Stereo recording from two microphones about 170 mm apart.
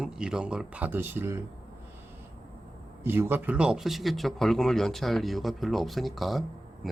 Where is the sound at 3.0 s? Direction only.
15° right (ahead or behind).